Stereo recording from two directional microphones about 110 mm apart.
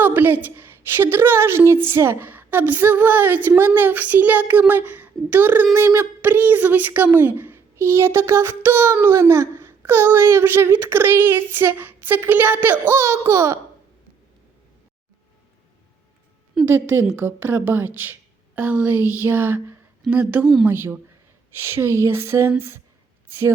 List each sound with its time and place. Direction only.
0.0 s a sound: 15° right (ahead or behind)
0.4 s a woman's voice: 20° right (ahead or behind)
16.6 s a woman's voice: 20° right (ahead or behind)
20.3 s speech: 5° right (ahead or behind)
20.7 s a woman's voice: 20° right (ahead or behind)